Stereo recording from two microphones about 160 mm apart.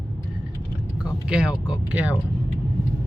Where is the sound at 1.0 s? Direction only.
5° right (ahead or behind).